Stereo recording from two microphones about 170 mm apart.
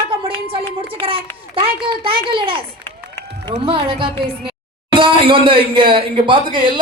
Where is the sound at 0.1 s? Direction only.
30° right (ahead or behind).